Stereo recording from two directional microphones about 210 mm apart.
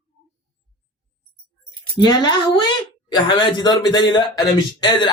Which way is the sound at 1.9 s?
20° left (ahead or behind).